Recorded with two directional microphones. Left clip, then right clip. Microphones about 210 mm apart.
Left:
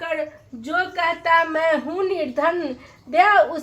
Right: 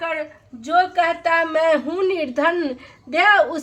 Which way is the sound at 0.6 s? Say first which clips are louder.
Right 5 dB; 10° right (ahead or behind).